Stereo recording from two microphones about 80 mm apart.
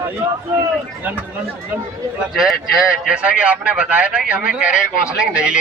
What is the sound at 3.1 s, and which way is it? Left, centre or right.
Speech, centre.